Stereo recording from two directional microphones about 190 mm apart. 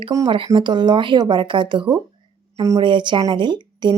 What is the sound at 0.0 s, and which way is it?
Speech, 20° right (ahead or behind).